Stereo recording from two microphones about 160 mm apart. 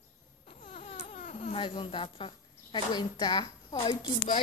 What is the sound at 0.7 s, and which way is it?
Speech, 40° left (ahead or behind).